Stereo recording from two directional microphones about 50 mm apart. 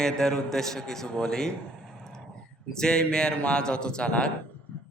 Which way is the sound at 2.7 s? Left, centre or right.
Centre.